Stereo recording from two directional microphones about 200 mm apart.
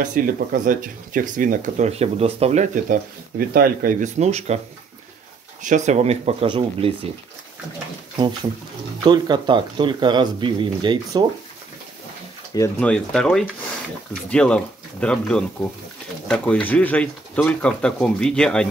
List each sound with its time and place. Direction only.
0.0 s speech: 40° right (ahead or behind)
5.6 s speech: 40° right (ahead or behind)
9.0 s speech: 20° right (ahead or behind)
12.5 s speech: 15° left (ahead or behind)
12.9 s speech: 5° left (ahead or behind)